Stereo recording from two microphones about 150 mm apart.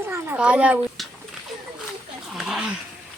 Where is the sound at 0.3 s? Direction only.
5° right (ahead or behind).